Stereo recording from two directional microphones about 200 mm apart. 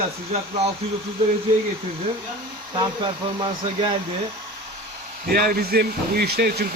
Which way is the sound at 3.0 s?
20° right (ahead or behind).